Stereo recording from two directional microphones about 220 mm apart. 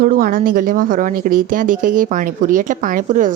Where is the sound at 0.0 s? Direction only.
40° right (ahead or behind).